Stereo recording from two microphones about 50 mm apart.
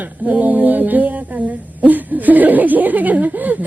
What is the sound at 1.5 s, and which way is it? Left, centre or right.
A woman's voice, right.